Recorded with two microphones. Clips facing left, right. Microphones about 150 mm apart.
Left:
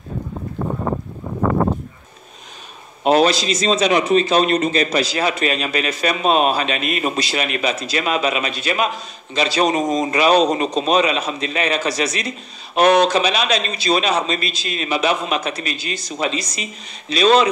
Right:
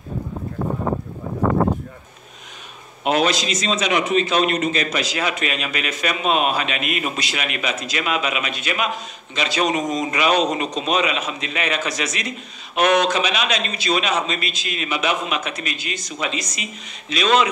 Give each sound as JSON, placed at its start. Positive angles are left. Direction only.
{"t": 3.0, "sound": "a man's voice", "side_deg": 35}